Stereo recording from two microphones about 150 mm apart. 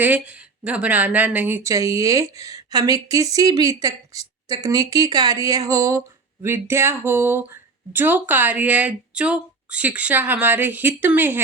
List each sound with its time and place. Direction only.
0.0 s a woman's voice: 10° right (ahead or behind)